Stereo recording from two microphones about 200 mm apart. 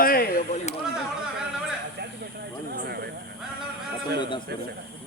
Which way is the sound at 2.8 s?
55° right (ahead or behind).